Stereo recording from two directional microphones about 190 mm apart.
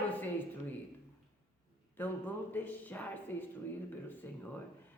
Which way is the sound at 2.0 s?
10° left (ahead or behind).